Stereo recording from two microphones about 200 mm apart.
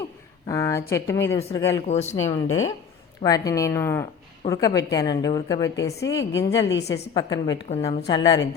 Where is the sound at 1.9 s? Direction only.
35° left (ahead or behind).